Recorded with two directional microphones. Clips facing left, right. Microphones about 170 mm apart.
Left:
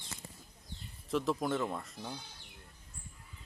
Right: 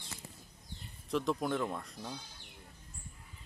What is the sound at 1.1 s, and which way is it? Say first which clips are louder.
Speech: even; centre (ahead or behind).